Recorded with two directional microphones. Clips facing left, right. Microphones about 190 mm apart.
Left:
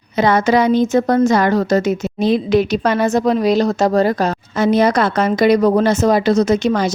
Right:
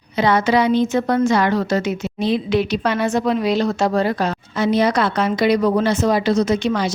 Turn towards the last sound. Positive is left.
turn(degrees=45)  # may be behind; listen again after turning